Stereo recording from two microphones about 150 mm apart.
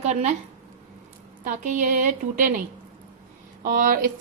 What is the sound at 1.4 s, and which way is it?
Speech, 55° right (ahead or behind).